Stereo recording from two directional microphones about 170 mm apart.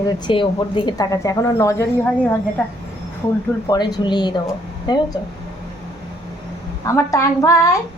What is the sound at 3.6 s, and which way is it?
A woman's voice, 25° left (ahead or behind).